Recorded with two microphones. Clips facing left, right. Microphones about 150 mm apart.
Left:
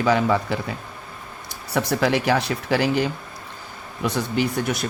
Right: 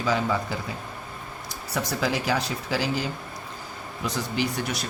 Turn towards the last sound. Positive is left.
turn(degrees=55)  # may be behind; listen again after turning